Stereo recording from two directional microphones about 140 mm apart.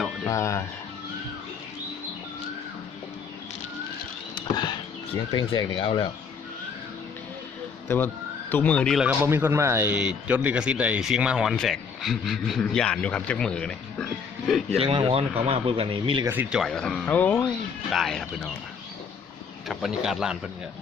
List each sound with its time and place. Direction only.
0.3 s speech: 20° left (ahead or behind)
4.4 s a sound: 30° left (ahead or behind)
5.3 s speech: 30° left (ahead or behind)
7.9 s speech: 15° left (ahead or behind)
9.2 s speech: 20° right (ahead or behind); by 13.7 s 5° left (ahead or behind)
14.8 s speech: 40° right (ahead or behind)
16.2 s speech: 15° right (ahead or behind)
19.6 s speech: centre (ahead or behind)